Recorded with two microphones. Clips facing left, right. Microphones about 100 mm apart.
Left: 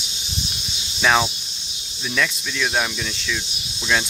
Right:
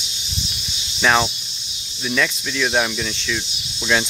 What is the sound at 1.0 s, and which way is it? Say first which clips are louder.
Cricket: right 1 dB; centre (ahead or behind).